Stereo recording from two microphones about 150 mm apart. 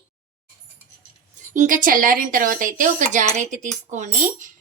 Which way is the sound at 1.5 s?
60° right (ahead or behind).